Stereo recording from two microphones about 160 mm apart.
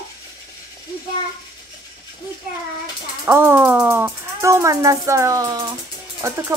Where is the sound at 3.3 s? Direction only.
15° right (ahead or behind).